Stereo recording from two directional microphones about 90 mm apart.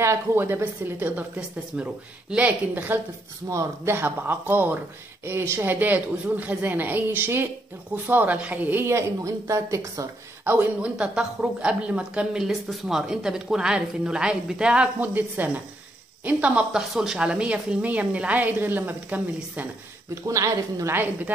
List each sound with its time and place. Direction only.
0.0 s a woman's voice: 25° right (ahead or behind)
3.4 s a woman's voice: 30° right (ahead or behind)
8.8 s speech: 30° right (ahead or behind)
10.4 s speech: 15° right (ahead or behind)
20.2 s speech: 35° right (ahead or behind)